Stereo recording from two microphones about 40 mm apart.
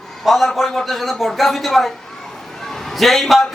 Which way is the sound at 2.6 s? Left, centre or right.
Centre.